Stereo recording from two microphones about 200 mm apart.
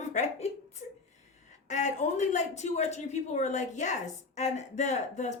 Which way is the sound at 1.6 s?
35° left (ahead or behind).